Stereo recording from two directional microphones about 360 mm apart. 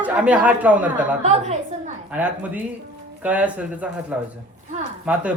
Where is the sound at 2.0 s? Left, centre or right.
Centre.